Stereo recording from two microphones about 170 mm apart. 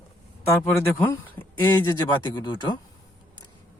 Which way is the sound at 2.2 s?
25° left (ahead or behind).